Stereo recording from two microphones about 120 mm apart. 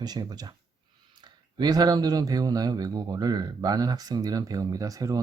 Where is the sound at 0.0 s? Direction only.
35° right (ahead or behind).